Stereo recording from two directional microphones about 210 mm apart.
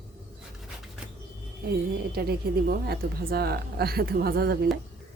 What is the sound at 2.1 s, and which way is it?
A woman's voice, 45° right (ahead or behind).